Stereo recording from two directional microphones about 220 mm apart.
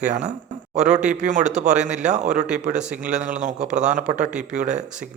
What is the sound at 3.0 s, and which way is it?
Speech, 35° right (ahead or behind).